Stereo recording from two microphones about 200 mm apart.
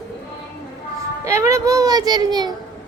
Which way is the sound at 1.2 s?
15° right (ahead or behind).